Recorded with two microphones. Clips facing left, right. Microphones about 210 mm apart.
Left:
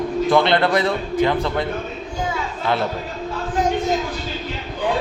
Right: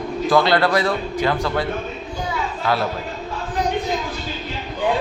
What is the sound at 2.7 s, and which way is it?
Speech, 20° left (ahead or behind).